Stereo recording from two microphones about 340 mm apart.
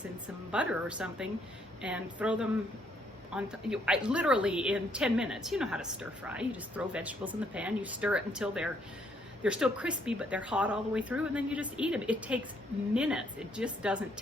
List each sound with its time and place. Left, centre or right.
0.5 s a woman's voice: centre